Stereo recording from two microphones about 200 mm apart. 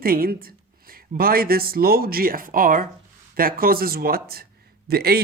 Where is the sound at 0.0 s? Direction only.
45° right (ahead or behind).